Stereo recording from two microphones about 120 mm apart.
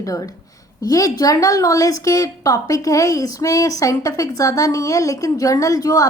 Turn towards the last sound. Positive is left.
turn(degrees=30)  # may be behind; listen again after turning